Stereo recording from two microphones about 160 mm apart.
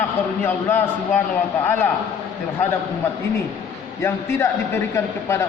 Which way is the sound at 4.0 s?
15° left (ahead or behind).